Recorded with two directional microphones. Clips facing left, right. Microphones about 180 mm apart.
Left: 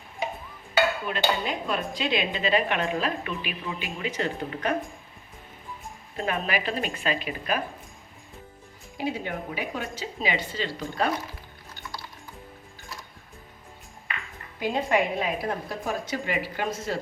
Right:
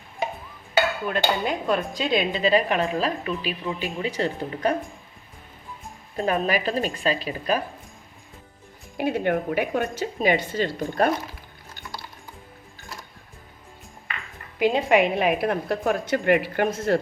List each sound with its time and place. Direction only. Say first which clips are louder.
1.1 s dishes: right 3 dB; 50° right (ahead or behind)
2.0 s a woman's voice: right 4 dB; 40° right (ahead or behind)
6.1 s a woman's voice: right 5 dB; 35° right (ahead or behind)
9.0 s a woman's voice: right 7 dB; 60° right (ahead or behind)
11.0 s dishes: right 5 dB; 50° right (ahead or behind)
14.6 s a woman's voice: right 5 dB; 70° right (ahead or behind)